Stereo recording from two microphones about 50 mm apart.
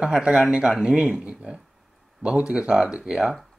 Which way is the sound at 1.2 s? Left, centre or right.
Right.